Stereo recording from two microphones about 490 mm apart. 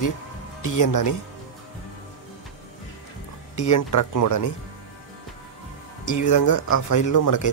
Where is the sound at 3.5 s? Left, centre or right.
Left.